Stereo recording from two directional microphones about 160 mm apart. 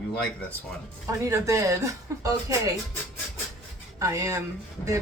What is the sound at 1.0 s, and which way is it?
Speech, 20° right (ahead or behind).